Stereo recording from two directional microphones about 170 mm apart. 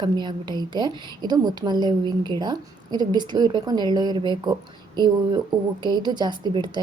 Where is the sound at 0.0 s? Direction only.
25° right (ahead or behind).